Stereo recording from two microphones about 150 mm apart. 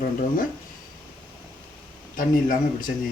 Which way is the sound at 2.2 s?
65° left (ahead or behind).